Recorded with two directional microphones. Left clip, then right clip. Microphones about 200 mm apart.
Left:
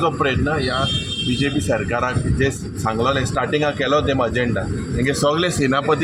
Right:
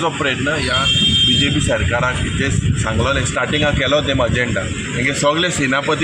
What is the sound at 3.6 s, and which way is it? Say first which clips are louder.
A man's voice: right 3 dB; 20° left (ahead or behind).